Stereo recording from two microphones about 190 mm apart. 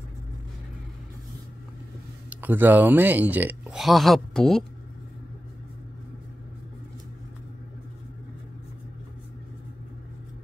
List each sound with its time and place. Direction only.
2.2 s speech: 10° right (ahead or behind)